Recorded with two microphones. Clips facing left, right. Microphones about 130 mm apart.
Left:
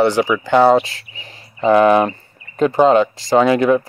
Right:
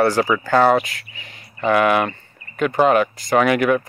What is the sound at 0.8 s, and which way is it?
Speech, 30° left (ahead or behind).